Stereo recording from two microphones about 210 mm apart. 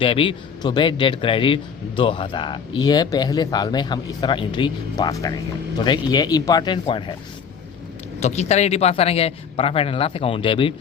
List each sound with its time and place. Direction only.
0.0 s a man's voice: 25° left (ahead or behind)
8.2 s a man's voice: 30° left (ahead or behind)